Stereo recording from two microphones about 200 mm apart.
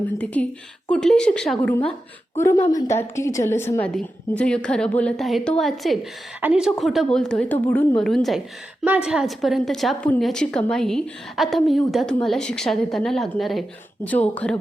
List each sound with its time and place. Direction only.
0.9 s a woman's voice: 5° left (ahead or behind)